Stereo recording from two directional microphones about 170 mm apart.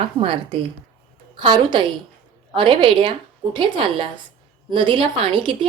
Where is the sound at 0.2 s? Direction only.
30° right (ahead or behind).